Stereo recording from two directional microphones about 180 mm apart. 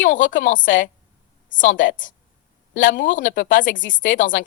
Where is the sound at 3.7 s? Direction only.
90° left.